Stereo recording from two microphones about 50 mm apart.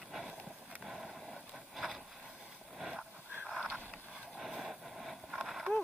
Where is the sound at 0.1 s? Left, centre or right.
Centre.